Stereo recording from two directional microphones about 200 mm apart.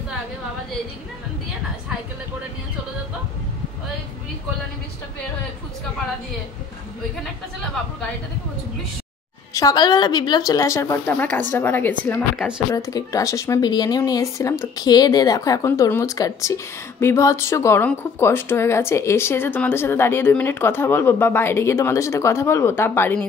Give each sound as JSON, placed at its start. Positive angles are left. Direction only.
{"t": 9.5, "sound": "speech", "side_deg": 15}
{"t": 12.4, "sound": "speech", "side_deg": -5}
{"t": 12.7, "sound": "speech", "side_deg": 15}